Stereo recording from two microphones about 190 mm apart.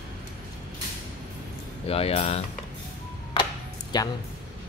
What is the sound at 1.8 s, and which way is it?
Speech, 30° left (ahead or behind).